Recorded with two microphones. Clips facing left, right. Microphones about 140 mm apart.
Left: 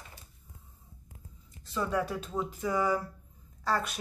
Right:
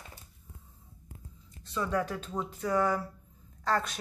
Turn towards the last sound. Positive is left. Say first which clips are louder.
# right 1 dB
turn(degrees=10)  # may be behind; listen again after turning